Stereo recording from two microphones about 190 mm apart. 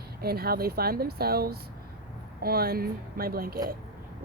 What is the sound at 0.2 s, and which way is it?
Speech, 55° right (ahead or behind).